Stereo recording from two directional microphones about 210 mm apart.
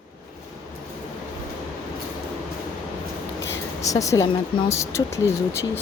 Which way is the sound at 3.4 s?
15° left (ahead or behind).